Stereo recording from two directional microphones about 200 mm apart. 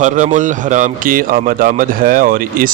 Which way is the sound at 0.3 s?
40° right (ahead or behind).